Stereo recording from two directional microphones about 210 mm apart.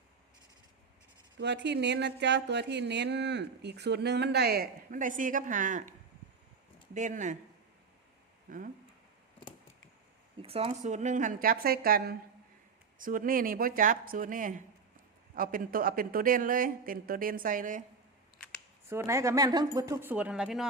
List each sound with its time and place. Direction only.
1.4 s a sound: 55° right (ahead or behind); by 5.9 s 40° right (ahead or behind)
6.9 s speech: 35° right (ahead or behind)
8.4 s speech: 40° right (ahead or behind)
10.4 s speech: 30° right (ahead or behind)
18.3 s camera: 5° left (ahead or behind)
18.9 s speech: 15° right (ahead or behind)